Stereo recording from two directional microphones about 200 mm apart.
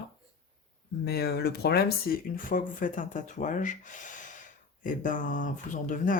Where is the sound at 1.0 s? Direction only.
55° left (ahead or behind).